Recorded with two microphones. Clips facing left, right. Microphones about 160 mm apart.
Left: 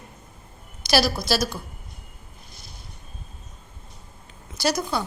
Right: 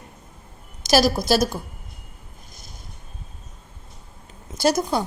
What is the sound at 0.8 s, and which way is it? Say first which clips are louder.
Speech: right 4 dB; 45° right (ahead or behind).